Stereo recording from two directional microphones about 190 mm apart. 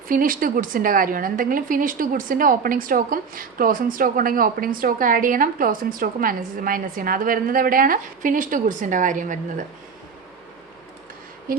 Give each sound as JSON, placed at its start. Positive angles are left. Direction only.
{"t": 0.1, "sound": "a woman's voice", "side_deg": -45}